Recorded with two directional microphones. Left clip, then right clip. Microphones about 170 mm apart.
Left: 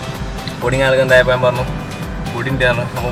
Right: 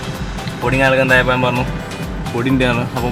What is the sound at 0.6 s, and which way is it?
Speech, centre (ahead or behind).